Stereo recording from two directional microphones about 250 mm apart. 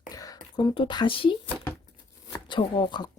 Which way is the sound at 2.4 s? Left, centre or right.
Centre.